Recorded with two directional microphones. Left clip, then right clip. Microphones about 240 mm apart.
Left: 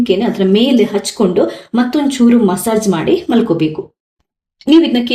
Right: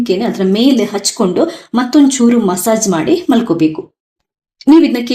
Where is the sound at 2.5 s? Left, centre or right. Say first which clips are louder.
Right 1 dB; right.